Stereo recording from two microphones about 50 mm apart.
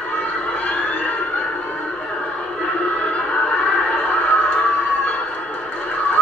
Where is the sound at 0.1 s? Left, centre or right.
Left.